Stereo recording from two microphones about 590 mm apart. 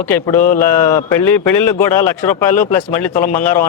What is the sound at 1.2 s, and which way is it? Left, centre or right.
Speech, left.